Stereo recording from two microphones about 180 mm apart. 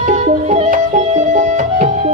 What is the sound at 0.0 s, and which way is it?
Music, 40° right (ahead or behind).